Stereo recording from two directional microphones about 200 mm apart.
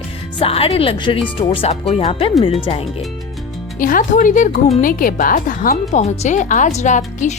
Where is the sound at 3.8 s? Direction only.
45° left (ahead or behind).